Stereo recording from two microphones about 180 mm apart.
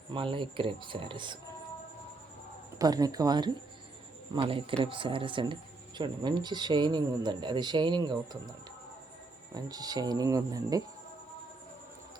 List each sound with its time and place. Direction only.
0.1 s speech: 30° right (ahead or behind)
2.7 s speech: 20° right (ahead or behind)
9.6 s speech: 20° right (ahead or behind)